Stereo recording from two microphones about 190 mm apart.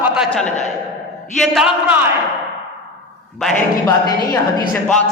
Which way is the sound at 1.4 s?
Centre (ahead or behind).